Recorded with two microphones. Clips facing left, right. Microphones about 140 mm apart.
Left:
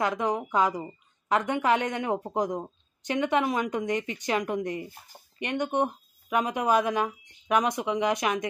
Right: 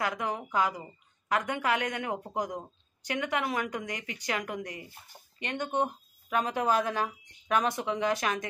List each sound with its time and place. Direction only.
0.0 s a woman's voice: 25° left (ahead or behind)